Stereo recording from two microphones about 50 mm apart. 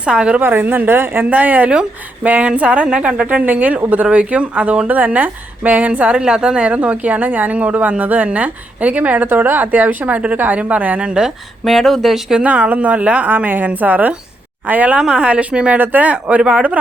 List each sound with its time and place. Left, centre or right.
0.0 s speech: right
0.3 s speech: right
1.3 s a woman's voice: right
11.6 s speech: centre
12.4 s a woman's voice: right
14.9 s speech: centre
15.8 s a woman's voice: right
16.4 s speech: centre